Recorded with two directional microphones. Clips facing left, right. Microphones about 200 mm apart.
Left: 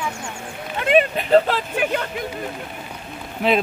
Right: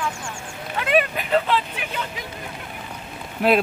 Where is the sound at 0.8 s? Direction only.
30° left (ahead or behind); by 2.1 s 50° left (ahead or behind).